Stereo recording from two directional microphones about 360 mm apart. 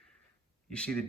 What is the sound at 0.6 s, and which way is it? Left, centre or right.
Speech, centre.